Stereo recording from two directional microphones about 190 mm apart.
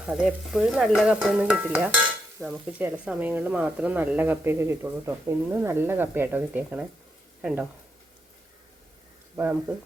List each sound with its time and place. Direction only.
0.0 s stir: 5° right (ahead or behind)
2.4 s speech: 5° right (ahead or behind)
7.4 s stir: 5° right (ahead or behind)
9.3 s speech: 10° right (ahead or behind)